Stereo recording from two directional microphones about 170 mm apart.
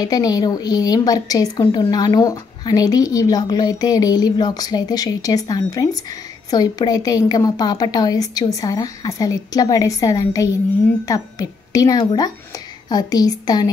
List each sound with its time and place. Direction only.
0.0 s a woman's voice: 20° left (ahead or behind)